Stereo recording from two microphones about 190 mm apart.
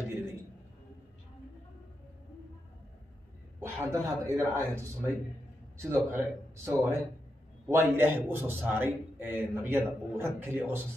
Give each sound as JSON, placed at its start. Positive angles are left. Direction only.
{"t": 3.6, "sound": "a man's voice", "side_deg": -15}